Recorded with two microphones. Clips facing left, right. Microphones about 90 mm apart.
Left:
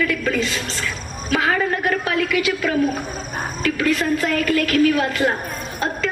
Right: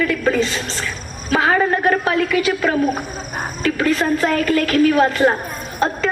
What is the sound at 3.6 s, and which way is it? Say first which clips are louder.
A woman's voice: right 2 dB; 35° right (ahead or behind).